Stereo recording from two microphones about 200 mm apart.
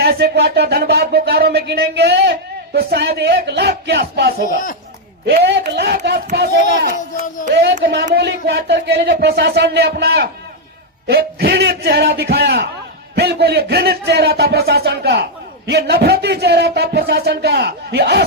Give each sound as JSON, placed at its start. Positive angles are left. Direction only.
{"t": 0.0, "sound": "a man's voice", "side_deg": -55}
{"t": 4.4, "sound": "speech", "side_deg": 40}
{"t": 5.2, "sound": "a man's voice", "side_deg": -55}
{"t": 7.5, "sound": "a man's voice", "side_deg": -55}